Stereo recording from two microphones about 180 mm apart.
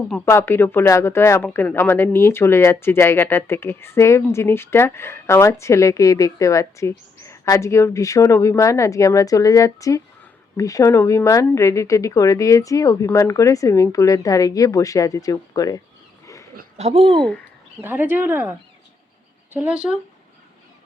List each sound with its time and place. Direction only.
0.3 s speech: 15° left (ahead or behind)
16.2 s a sound: 15° left (ahead or behind)
16.7 s speech: 35° right (ahead or behind)
17.2 s speech: 5° left (ahead or behind)
17.7 s speech: 10° right (ahead or behind)
19.5 s speech: 5° right (ahead or behind)